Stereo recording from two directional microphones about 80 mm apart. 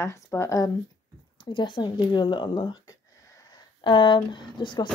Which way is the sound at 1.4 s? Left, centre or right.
Left.